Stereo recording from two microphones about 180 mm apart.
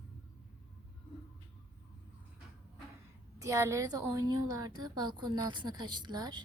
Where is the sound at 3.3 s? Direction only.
15° right (ahead or behind).